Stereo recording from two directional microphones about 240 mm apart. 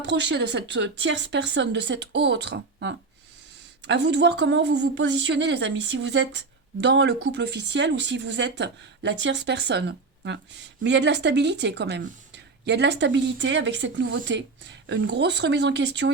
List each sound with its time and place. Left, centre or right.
0.0 s a woman's voice: right